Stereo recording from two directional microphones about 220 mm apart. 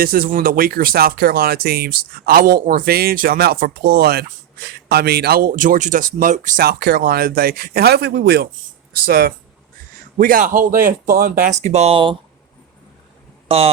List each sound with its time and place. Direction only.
0.0 s a man's voice: 40° right (ahead or behind); by 12.1 s 25° right (ahead or behind)
13.5 s speech: 25° right (ahead or behind)